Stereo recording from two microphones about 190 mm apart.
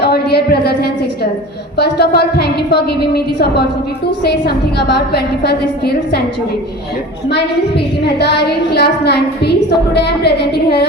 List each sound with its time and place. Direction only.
0.0 s a sound: 55° left (ahead or behind)
1.7 s a woman's voice: 60° left (ahead or behind)
8.0 s a woman's voice: 60° left (ahead or behind)